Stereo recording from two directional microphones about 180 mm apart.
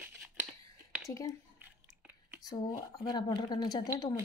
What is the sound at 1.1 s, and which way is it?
Speech, 20° left (ahead or behind).